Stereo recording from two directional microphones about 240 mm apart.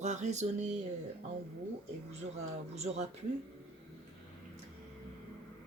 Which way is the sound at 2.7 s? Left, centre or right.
Right.